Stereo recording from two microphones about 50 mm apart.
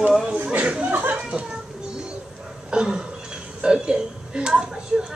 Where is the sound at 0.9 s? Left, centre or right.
Right.